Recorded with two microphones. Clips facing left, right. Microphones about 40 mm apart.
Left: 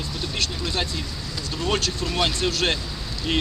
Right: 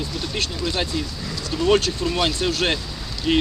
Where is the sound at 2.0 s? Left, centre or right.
Centre.